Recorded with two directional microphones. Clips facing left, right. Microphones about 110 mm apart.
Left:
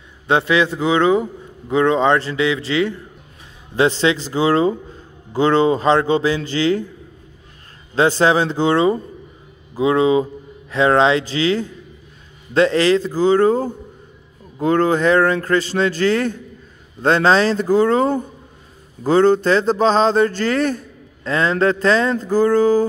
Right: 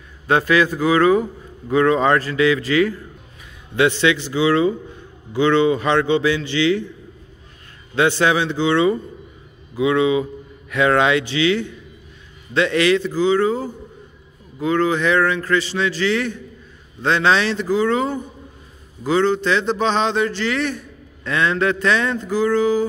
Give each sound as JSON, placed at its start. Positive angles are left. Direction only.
{"t": 0.3, "sound": "a man's voice", "side_deg": 20}
{"t": 7.9, "sound": "a man's voice", "side_deg": 35}